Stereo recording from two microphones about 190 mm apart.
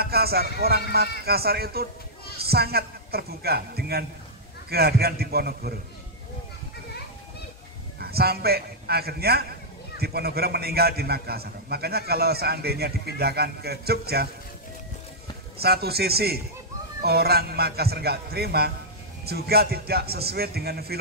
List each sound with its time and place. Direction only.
0.0 s a man's voice: 55° right (ahead or behind)
8.0 s a man's voice: 55° right (ahead or behind)
15.5 s a man's voice: 55° right (ahead or behind)